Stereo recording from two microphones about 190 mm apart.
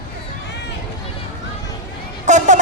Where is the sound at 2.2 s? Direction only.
40° right (ahead or behind).